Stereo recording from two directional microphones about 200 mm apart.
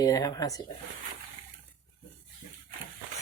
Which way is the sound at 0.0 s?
20° left (ahead or behind).